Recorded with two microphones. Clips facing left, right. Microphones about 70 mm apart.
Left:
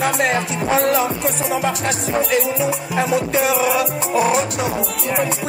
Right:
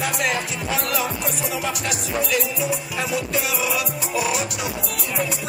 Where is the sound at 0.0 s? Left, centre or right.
Left.